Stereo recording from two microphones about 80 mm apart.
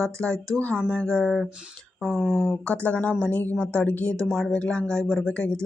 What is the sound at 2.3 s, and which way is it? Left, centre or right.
A woman's voice, left.